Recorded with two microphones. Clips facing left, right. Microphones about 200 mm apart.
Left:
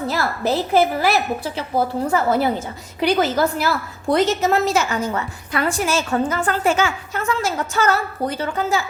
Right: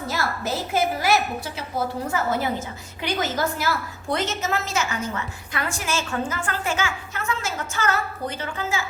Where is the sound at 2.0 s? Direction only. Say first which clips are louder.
Left 7 dB; 35° left (ahead or behind).